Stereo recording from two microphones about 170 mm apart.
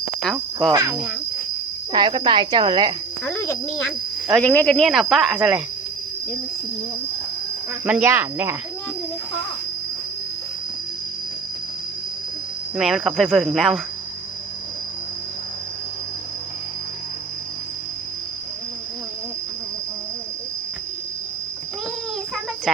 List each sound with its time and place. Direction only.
0.2 s cricket: centre (ahead or behind)
0.7 s speech: 20° right (ahead or behind)
3.2 s speech: 15° left (ahead or behind)
4.3 s speech: 5° left (ahead or behind)
7.9 s speech: 10° right (ahead or behind)
12.7 s speech: 5° right (ahead or behind)